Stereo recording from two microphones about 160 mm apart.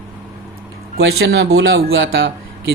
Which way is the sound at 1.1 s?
90° right.